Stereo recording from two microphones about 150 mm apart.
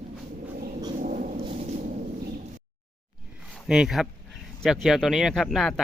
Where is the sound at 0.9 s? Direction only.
60° right (ahead or behind).